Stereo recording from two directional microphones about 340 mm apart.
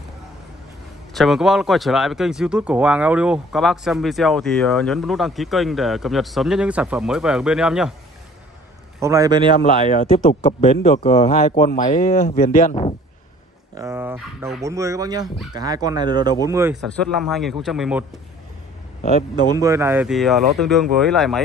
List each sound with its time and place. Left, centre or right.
1.1 s speech: centre
9.0 s speech: centre
11.0 s speech: centre
13.7 s speech: centre
19.4 s speech: centre